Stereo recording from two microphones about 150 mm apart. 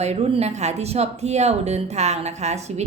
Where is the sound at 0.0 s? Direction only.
45° right (ahead or behind).